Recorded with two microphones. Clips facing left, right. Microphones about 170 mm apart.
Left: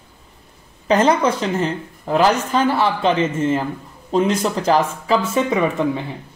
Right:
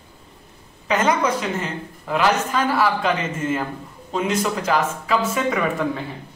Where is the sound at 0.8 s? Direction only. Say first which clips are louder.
Left 4 dB; 35° left (ahead or behind).